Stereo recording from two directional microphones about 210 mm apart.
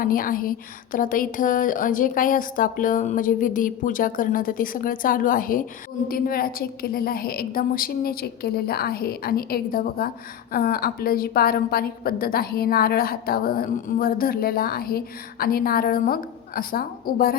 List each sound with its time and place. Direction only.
0.0 s a woman's voice: 40° left (ahead or behind)